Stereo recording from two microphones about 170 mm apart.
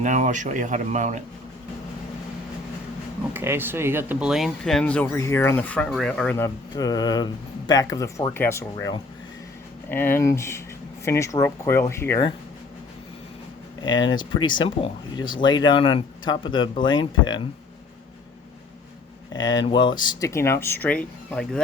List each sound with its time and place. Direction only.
0.0 s speech: 45° right (ahead or behind)
3.3 s speech: 15° right (ahead or behind); by 6.3 s 5° left (ahead or behind)
6.3 s speech: 20° left (ahead or behind)
13.8 s speech: 25° left (ahead or behind)
19.3 s speech: 25° left (ahead or behind)